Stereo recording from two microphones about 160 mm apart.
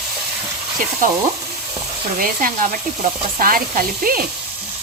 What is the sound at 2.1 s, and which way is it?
Frying, 60° right (ahead or behind).